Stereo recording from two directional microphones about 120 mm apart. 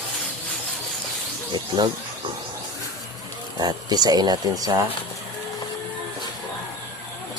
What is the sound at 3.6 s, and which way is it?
Speech, 35° right (ahead or behind).